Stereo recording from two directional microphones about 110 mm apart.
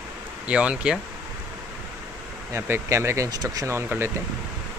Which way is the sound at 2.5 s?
25° right (ahead or behind).